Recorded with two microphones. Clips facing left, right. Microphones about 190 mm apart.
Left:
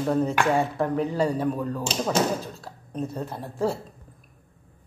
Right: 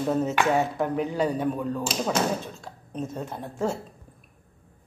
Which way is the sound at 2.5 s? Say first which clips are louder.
Left 1 dB; centre (ahead or behind).